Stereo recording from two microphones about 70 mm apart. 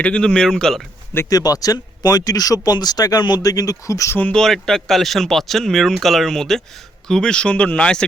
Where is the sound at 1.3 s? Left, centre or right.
Left.